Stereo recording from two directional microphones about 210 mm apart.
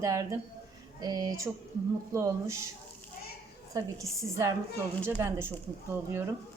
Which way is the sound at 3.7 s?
15° right (ahead or behind).